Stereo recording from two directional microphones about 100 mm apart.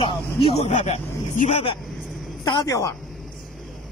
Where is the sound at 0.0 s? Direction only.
75° left (ahead or behind).